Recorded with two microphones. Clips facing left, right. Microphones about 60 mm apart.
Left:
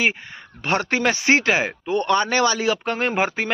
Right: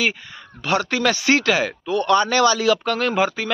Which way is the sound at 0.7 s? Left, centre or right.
Left.